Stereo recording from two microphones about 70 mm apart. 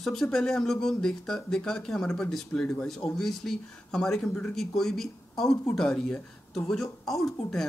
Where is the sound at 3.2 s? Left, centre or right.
Centre.